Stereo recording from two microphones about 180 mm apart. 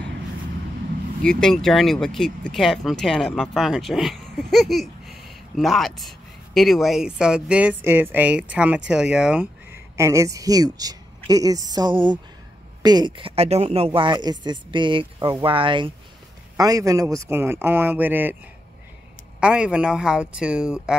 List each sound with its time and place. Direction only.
1.2 s a man's voice: 5° left (ahead or behind)
19.4 s speech: 5° right (ahead or behind)